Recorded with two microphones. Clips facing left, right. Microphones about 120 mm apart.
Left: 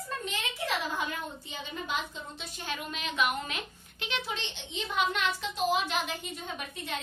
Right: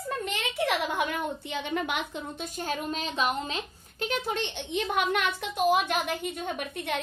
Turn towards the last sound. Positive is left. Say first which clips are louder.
# right 6 dB
turn(degrees=-60)  # may be behind; listen again after turning